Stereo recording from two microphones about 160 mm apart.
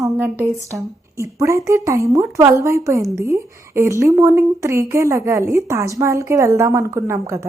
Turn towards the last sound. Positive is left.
turn(degrees=-15)  # may be behind; listen again after turning